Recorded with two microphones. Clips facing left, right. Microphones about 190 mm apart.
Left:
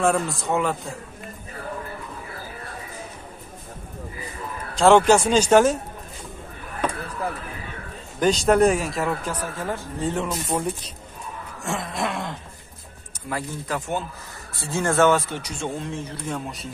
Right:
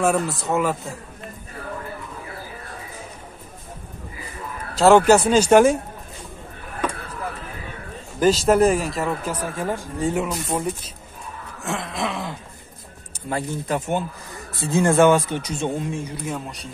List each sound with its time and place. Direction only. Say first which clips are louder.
0.0 s speech: right 1 dB; 5° right (ahead or behind)
4.7 s speech: right 2 dB; 5° right (ahead or behind)
8.2 s speech: right 1 dB; 5° right (ahead or behind)
9.3 s speech: right 3 dB; 10° right (ahead or behind)
11.6 s a sound: right 1 dB; centre (ahead or behind)
13.3 s speech: right 4 dB; 20° right (ahead or behind)